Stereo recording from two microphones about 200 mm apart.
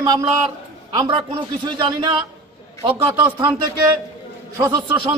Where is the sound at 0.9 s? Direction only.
25° right (ahead or behind).